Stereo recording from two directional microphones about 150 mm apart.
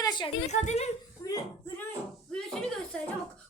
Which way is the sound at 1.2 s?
20° left (ahead or behind).